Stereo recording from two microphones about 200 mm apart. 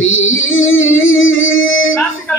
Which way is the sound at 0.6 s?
80° left.